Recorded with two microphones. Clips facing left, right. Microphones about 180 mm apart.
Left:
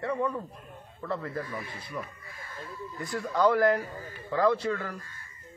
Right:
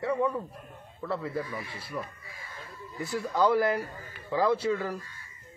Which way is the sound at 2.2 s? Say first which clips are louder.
Left 1 dB; 55° left (ahead or behind).